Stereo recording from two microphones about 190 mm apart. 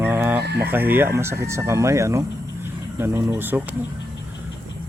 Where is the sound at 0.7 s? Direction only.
10° right (ahead or behind).